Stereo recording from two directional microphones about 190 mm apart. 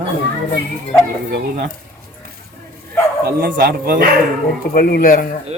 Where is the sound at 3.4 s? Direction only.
50° right (ahead or behind).